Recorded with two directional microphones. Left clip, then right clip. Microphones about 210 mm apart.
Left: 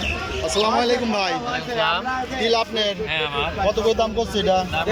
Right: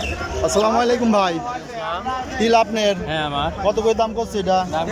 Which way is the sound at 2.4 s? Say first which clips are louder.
Right 5 dB; 10° right (ahead or behind).